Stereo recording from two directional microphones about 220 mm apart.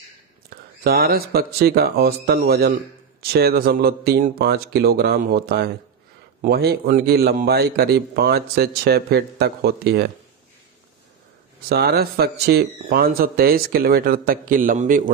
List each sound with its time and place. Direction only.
0.5 s a man's voice: 45° right (ahead or behind)
11.7 s a man's voice: 45° right (ahead or behind)